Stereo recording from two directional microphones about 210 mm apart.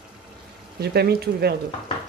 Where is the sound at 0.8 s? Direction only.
50° right (ahead or behind).